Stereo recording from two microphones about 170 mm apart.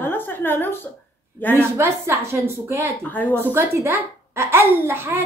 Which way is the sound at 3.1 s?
10° left (ahead or behind).